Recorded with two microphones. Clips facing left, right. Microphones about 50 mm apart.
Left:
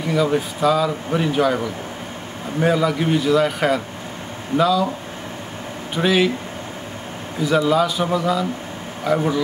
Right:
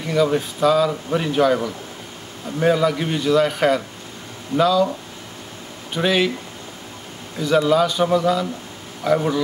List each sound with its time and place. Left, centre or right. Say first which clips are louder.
0.1 s a man's voice: right 1 dB; centre
5.9 s a man's voice: left 1 dB; centre
7.3 s a man's voice: even; centre